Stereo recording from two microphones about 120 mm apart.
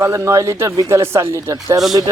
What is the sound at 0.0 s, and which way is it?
Speech, 25° right (ahead or behind).